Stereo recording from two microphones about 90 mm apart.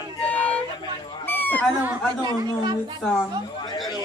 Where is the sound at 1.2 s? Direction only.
20° left (ahead or behind).